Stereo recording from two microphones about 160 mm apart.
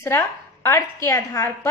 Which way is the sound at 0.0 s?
15° left (ahead or behind).